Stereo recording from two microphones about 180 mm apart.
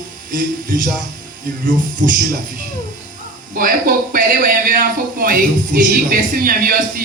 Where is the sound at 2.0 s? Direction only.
45° right (ahead or behind).